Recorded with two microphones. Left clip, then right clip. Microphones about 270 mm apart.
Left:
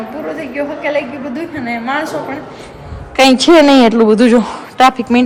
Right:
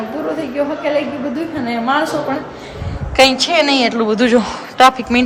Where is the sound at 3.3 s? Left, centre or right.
Centre.